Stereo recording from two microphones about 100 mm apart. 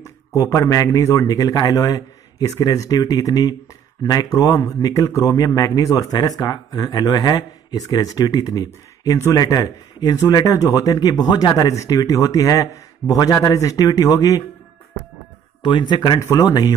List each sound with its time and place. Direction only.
0.4 s speech: 35° left (ahead or behind)
15.6 s speech: 50° left (ahead or behind)